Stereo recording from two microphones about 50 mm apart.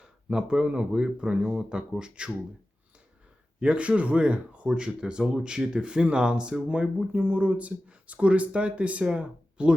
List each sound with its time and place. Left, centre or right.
0.0 s speech: centre
3.6 s speech: right